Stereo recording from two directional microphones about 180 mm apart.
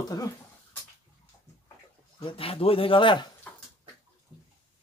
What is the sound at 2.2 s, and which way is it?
Speech, 30° left (ahead or behind).